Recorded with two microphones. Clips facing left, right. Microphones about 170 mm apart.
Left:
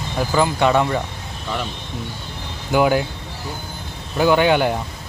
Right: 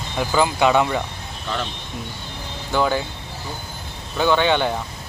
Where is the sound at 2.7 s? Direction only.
10° left (ahead or behind).